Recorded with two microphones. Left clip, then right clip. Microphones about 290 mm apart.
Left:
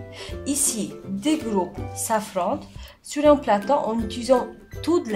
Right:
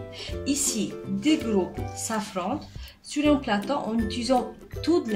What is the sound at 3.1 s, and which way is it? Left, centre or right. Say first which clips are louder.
Speech: left 6 dB; left.